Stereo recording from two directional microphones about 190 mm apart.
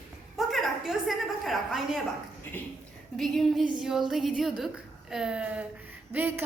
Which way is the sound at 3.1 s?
Centre (ahead or behind).